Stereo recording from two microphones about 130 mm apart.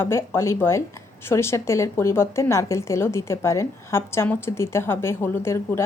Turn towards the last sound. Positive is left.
turn(degrees=20)  # may be behind; listen again after turning